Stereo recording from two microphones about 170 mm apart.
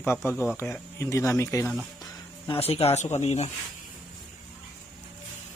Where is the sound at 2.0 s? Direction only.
30° left (ahead or behind).